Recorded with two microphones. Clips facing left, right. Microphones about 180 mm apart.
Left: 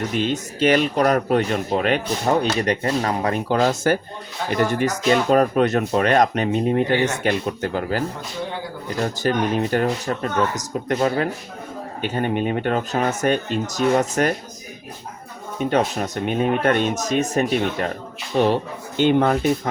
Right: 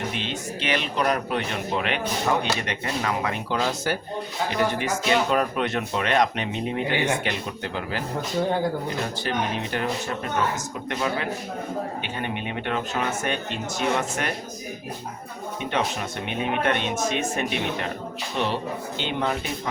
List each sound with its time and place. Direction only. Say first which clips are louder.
0.1 s speech: left 7 dB; 45° left (ahead or behind)
9.2 s speech: left 9 dB; 45° left (ahead or behind)
15.5 s speech: left 7 dB; 40° left (ahead or behind)